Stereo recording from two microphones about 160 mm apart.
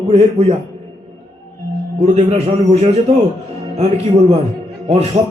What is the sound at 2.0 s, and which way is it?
A man's voice, 45° right (ahead or behind).